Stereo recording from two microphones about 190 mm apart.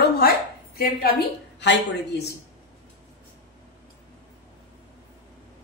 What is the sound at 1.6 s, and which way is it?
Speech, 65° left (ahead or behind).